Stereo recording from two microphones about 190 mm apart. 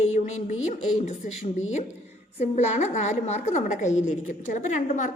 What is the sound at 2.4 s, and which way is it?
A woman's voice, 35° left (ahead or behind).